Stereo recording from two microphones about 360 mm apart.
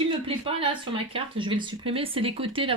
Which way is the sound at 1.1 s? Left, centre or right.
Centre.